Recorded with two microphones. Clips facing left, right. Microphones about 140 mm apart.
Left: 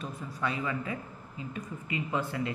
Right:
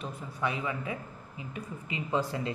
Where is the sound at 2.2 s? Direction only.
30° right (ahead or behind).